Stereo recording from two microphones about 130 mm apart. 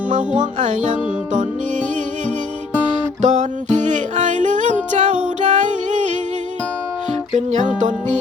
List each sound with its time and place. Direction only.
0.1 s music: 70° right (ahead or behind)
3.2 s music: 65° right (ahead or behind)
7.3 s music: 60° right (ahead or behind)